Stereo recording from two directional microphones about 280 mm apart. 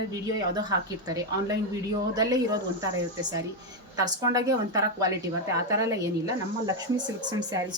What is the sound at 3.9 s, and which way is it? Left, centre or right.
A woman's voice, centre.